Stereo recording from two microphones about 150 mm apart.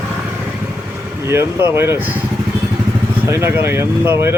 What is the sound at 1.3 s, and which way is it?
Speech, 15° right (ahead or behind).